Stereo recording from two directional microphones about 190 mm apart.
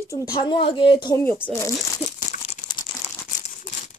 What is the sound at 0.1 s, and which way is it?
Speech, 20° left (ahead or behind).